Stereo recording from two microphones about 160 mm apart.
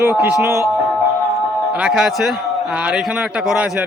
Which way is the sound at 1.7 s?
5° right (ahead or behind).